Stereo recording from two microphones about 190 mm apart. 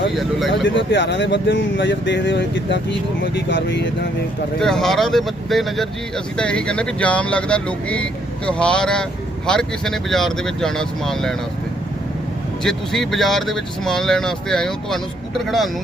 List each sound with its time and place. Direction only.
0.1 s speech: centre (ahead or behind)
0.6 s speech: 70° left (ahead or behind)
4.6 s speech: centre (ahead or behind)
12.6 s speech: centre (ahead or behind)